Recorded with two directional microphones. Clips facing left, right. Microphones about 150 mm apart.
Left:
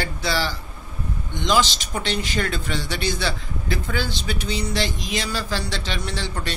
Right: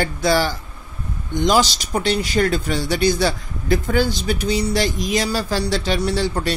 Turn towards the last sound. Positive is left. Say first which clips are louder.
# right 8 dB
turn(degrees=-40)  # may be behind; listen again after turning